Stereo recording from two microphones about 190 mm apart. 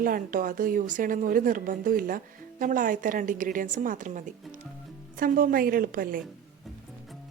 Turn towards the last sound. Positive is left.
turn(degrees=-50)  # may be behind; listen again after turning